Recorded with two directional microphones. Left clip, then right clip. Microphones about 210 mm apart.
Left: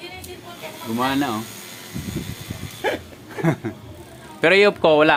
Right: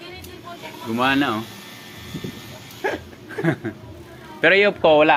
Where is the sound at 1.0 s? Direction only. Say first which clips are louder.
Right 3 dB; centre (ahead or behind).